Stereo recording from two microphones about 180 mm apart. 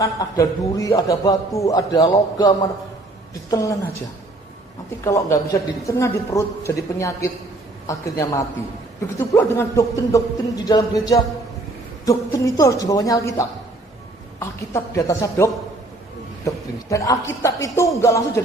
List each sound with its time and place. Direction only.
0.0 s a man's voice: 20° left (ahead or behind)
5.0 s a man's voice: 15° left (ahead or behind)